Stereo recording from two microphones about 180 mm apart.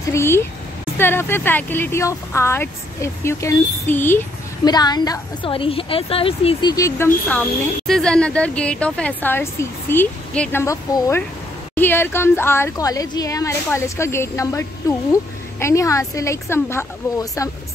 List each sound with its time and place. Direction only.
0.0 s a woman's voice: 15° left (ahead or behind)
4.6 s a woman's voice: 20° left (ahead or behind)
7.2 s a woman's voice: 5° left (ahead or behind)